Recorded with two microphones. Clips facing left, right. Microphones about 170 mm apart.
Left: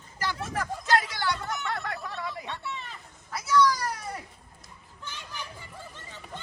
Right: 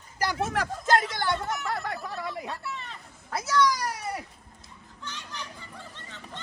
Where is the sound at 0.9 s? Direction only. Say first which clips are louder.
Right 2 dB; 50° right (ahead or behind).